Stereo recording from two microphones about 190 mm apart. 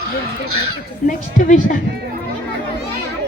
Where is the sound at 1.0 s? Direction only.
45° left (ahead or behind).